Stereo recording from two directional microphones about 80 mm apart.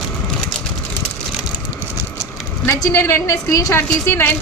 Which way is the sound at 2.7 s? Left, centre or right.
Left.